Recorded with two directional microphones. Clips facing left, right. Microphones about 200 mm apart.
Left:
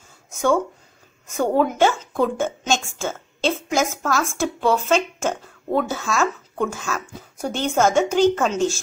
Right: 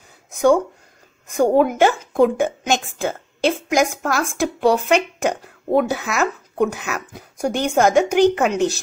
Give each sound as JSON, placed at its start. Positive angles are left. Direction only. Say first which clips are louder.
{"t": 0.3, "sound": "a woman's voice", "louder": "right 4 dB", "side_deg": -15}